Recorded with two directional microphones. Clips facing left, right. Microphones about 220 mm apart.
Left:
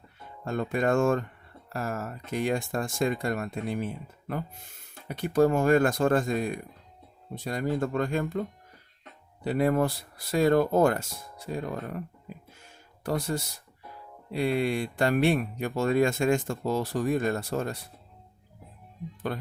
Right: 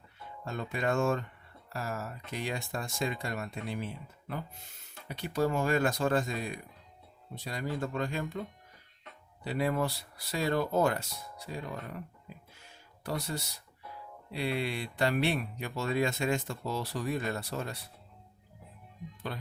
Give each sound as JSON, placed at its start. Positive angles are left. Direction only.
{"t": 0.4, "sound": "speech", "side_deg": 50}
{"t": 12.6, "sound": "music", "side_deg": 50}
{"t": 14.3, "sound": "speech", "side_deg": 50}
{"t": 19.3, "sound": "speech", "side_deg": 50}